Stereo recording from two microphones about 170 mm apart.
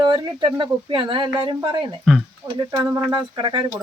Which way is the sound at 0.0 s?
25° right (ahead or behind).